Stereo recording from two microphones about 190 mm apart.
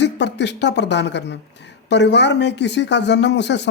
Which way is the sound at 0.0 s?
65° left (ahead or behind).